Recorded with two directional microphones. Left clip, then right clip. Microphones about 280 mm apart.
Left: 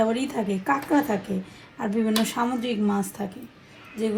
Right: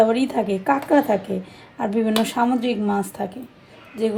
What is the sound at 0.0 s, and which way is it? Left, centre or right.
A woman's voice, right.